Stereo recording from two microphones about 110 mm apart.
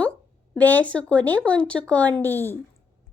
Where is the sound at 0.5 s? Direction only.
15° left (ahead or behind).